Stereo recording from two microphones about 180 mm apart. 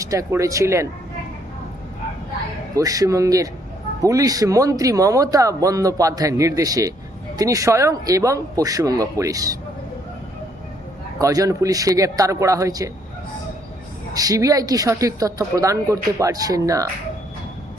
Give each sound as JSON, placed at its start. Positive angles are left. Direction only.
{"t": 0.0, "sound": "speech", "side_deg": -20}
{"t": 2.7, "sound": "speech", "side_deg": -20}
{"t": 11.2, "sound": "speech", "side_deg": -20}
{"t": 14.1, "sound": "speech", "side_deg": -20}